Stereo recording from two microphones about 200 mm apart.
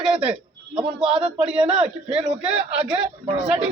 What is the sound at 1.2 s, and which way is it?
Speech, 30° right (ahead or behind).